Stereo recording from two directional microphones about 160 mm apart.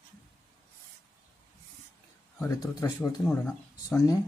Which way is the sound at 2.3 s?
15° left (ahead or behind).